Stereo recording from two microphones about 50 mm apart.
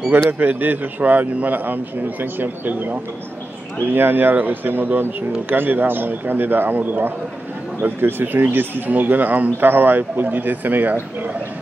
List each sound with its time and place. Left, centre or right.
0.3 s a man's voice: right